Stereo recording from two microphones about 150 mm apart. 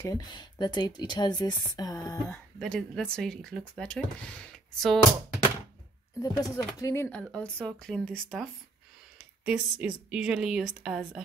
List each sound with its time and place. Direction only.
0.0 s speech: 25° left (ahead or behind)
2.6 s speech: 5° left (ahead or behind)
6.2 s speech: 25° left (ahead or behind); by 8.5 s 5° left (ahead or behind)
9.4 s speech: 5° right (ahead or behind)